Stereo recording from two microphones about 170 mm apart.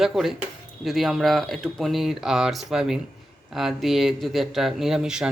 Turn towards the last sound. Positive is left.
turn(degrees=-5)  # may be behind; listen again after turning